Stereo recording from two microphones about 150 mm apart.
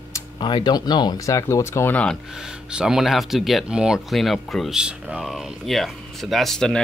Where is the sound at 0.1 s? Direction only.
30° left (ahead or behind); by 2.1 s 10° left (ahead or behind).